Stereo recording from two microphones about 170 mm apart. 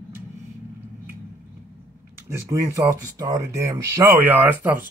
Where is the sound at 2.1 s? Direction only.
15° right (ahead or behind).